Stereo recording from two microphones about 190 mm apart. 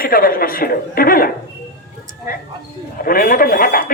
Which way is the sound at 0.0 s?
50° left (ahead or behind).